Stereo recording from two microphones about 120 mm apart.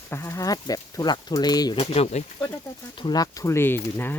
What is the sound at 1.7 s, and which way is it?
Speech, 55° left (ahead or behind).